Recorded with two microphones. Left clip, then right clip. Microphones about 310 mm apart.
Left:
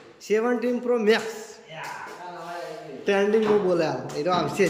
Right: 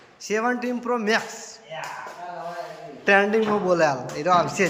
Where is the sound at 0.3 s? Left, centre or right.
Centre.